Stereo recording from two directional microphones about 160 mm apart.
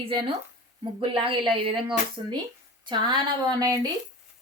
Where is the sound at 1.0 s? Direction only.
35° right (ahead or behind).